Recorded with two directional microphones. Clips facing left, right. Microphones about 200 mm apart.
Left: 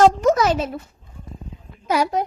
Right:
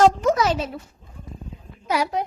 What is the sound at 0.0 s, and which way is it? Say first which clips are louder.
Speech: left 2 dB; 45° left (ahead or behind).